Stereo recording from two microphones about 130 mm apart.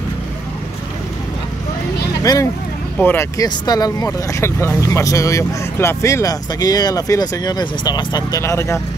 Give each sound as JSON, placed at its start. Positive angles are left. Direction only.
{"t": 2.3, "sound": "speech", "side_deg": 30}
{"t": 3.0, "sound": "speech", "side_deg": 15}
{"t": 3.3, "sound": "speech", "side_deg": 30}
{"t": 8.4, "sound": "speech", "side_deg": 20}